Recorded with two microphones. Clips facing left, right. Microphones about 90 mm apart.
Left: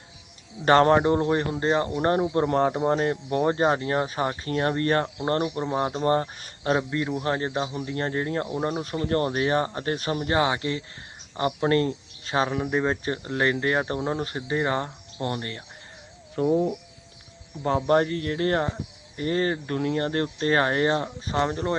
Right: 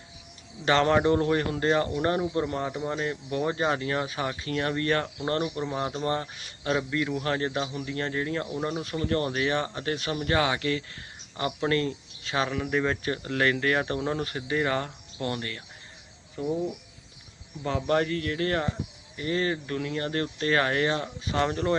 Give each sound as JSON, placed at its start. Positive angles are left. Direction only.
{"t": 0.6, "sound": "speech", "side_deg": 45}
{"t": 0.9, "sound": "speech", "side_deg": 25}
{"t": 1.9, "sound": "speech", "side_deg": 35}
{"t": 21.3, "sound": "speech", "side_deg": 25}